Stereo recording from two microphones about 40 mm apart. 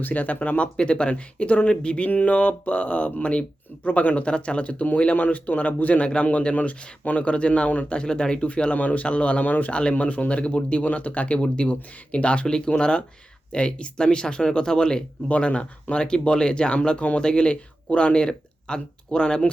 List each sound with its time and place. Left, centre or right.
0.0 s speech: left
0.8 s speech: left
2.0 s speech: left
5.1 s speech: left
7.9 s speech: left
9.4 s speech: left; by 15.0 s centre
15.3 s speech: left